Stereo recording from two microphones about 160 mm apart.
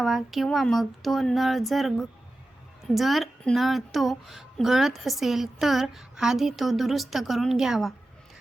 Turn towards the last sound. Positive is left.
turn(degrees=0)  # may be behind; listen again after turning